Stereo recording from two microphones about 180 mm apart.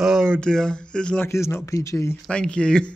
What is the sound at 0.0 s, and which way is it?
Speech, centre (ahead or behind).